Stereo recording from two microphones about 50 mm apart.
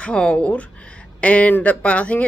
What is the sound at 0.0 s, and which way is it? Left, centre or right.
Speech, left.